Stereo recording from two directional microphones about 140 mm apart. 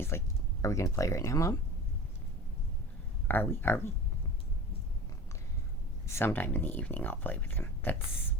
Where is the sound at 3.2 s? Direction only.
15° left (ahead or behind).